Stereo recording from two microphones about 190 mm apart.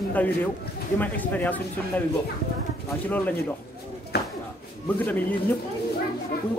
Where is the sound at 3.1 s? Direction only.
10° left (ahead or behind).